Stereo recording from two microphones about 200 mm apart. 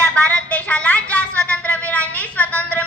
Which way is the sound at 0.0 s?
5° left (ahead or behind).